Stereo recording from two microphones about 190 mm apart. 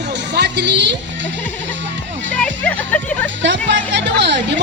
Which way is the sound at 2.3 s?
5° left (ahead or behind).